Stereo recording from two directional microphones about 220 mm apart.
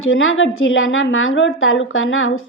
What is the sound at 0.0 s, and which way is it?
A woman's voice, 65° left (ahead or behind).